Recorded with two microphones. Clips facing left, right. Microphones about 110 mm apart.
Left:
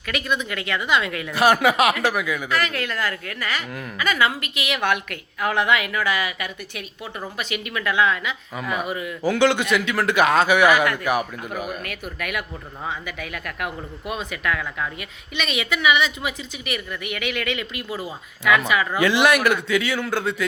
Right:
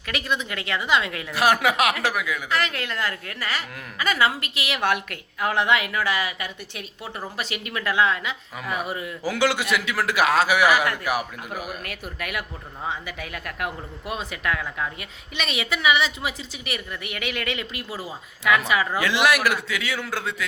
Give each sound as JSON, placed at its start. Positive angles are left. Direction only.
{"t": 0.1, "sound": "a woman's voice", "side_deg": -30}
{"t": 1.3, "sound": "a man's voice", "side_deg": 0}
{"t": 2.5, "sound": "a woman's voice", "side_deg": -25}
{"t": 8.5, "sound": "a man's voice", "side_deg": 0}
{"t": 8.9, "sound": "a woman's voice", "side_deg": -30}
{"t": 9.2, "sound": "a man's voice", "side_deg": -5}
{"t": 12.2, "sound": "a woman's voice", "side_deg": -30}
{"t": 17.8, "sound": "speech", "side_deg": 20}
{"t": 18.9, "sound": "a man's voice", "side_deg": 0}